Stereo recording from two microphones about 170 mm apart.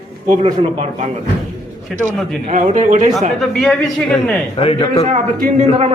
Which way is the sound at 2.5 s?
45° right (ahead or behind).